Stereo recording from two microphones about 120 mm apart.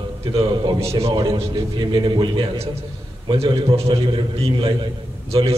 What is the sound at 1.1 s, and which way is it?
A man's voice, 40° right (ahead or behind).